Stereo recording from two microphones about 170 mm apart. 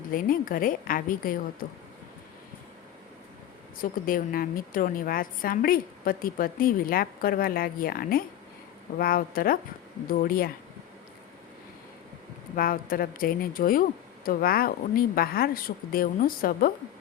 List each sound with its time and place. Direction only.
0.1 s a woman's voice: 55° left (ahead or behind)
3.8 s a woman's voice: 55° left (ahead or behind)
12.5 s a woman's voice: 60° left (ahead or behind)